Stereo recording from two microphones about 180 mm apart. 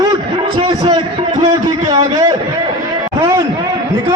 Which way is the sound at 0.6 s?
25° right (ahead or behind).